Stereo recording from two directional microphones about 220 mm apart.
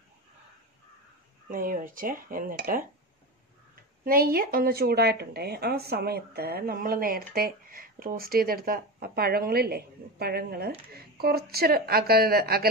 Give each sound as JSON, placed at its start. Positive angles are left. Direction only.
{"t": 1.5, "sound": "speech", "side_deg": -40}
{"t": 4.0, "sound": "speech", "side_deg": -40}